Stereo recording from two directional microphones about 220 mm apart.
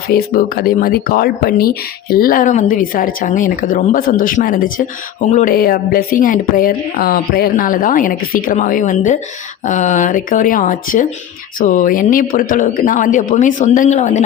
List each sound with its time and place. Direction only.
0.1 s speech: 45° left (ahead or behind)